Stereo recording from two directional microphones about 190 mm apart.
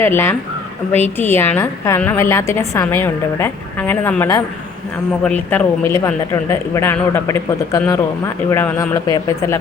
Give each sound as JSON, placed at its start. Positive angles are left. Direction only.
{"t": 0.0, "sound": "a woman's voice", "side_deg": 10}